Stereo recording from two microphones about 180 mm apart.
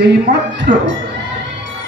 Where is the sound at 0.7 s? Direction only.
65° right (ahead or behind).